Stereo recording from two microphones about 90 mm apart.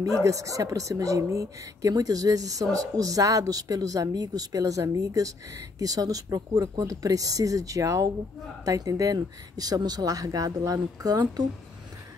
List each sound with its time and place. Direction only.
0.2 s speech: 35° right (ahead or behind)